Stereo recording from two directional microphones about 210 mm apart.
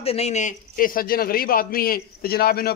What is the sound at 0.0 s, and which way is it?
A man's voice, 30° left (ahead or behind).